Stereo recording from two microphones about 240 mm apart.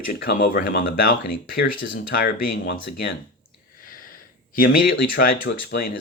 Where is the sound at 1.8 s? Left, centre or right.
Left.